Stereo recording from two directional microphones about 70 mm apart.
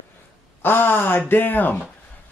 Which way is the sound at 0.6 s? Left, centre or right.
Left.